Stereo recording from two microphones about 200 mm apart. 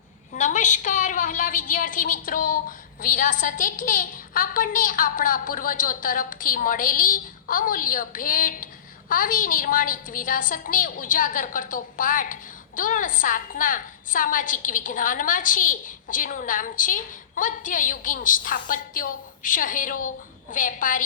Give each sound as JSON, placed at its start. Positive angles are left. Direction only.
{"t": 0.3, "sound": "a woman's voice", "side_deg": 40}